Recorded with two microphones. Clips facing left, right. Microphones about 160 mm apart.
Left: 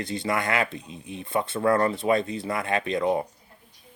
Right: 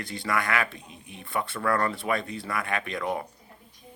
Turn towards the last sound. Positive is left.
turn(degrees=25)  # may be behind; listen again after turning